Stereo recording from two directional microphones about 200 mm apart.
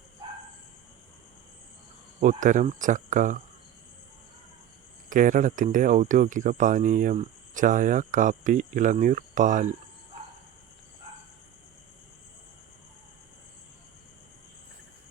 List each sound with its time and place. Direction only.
2.2 s speech: 40° right (ahead or behind)
5.0 s speech: 40° right (ahead or behind)